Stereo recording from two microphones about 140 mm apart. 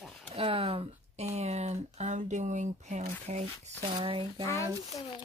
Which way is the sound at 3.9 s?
40° right (ahead or behind).